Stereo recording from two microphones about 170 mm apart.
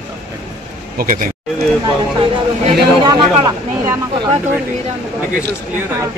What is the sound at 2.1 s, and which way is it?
Speech, 30° right (ahead or behind).